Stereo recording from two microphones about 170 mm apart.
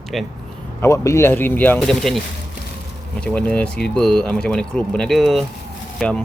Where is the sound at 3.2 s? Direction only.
5° left (ahead or behind).